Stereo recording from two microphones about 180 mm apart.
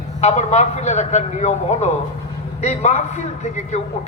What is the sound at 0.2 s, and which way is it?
Speech, 40° left (ahead or behind).